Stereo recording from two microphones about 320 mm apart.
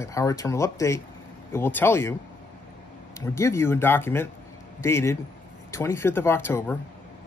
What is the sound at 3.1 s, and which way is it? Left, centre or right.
Speech, centre.